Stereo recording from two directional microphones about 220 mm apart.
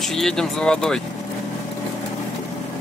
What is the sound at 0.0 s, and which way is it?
Speech, centre (ahead or behind).